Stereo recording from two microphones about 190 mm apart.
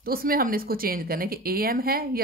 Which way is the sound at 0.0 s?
50° right (ahead or behind).